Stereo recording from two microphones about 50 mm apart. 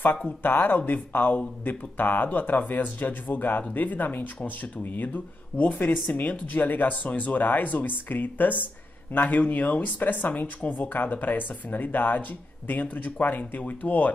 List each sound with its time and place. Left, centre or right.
0.0 s speech: left